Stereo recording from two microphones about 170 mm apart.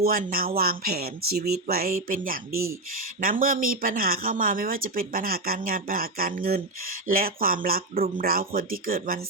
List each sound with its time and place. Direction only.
0.0 s speech: 55° right (ahead or behind)